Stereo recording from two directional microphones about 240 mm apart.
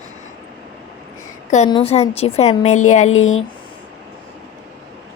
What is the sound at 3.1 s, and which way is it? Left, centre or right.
Speech, left.